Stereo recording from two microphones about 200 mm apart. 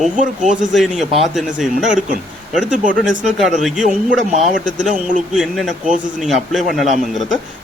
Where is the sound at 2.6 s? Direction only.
40° right (ahead or behind).